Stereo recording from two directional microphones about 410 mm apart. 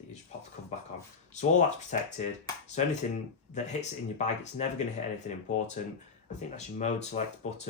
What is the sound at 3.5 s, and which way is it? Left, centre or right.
Speech, centre.